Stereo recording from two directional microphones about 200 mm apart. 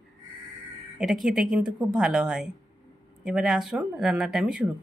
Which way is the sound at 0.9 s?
Centre (ahead or behind).